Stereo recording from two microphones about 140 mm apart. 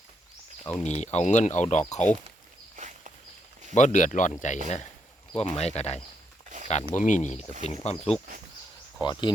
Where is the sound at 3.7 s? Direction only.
60° left (ahead or behind).